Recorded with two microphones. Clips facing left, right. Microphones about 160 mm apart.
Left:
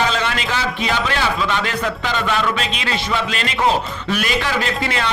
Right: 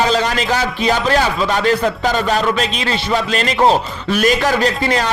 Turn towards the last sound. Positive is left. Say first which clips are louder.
# right 5 dB
turn(degrees=-40)  # may be behind; listen again after turning